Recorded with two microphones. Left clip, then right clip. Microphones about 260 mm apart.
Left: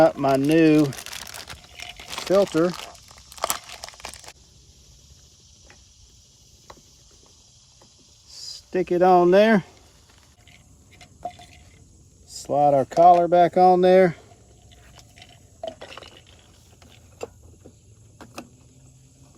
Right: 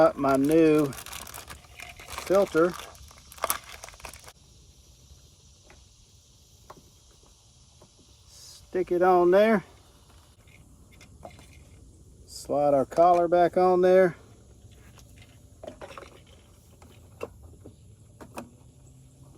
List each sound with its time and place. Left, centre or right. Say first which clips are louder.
0.0 s speech: left 3 dB; left
1.7 s a sound: left 5 dB; left
8.3 s speech: left 5 dB; left
12.4 s speech: left 5 dB; left